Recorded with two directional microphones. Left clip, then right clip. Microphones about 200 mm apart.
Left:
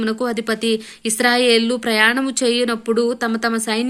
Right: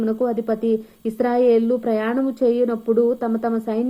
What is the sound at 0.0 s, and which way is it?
Speech, 35° left (ahead or behind).